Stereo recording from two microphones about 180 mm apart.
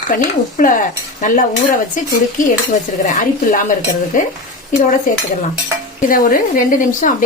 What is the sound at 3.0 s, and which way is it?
Cutlery, 50° left (ahead or behind).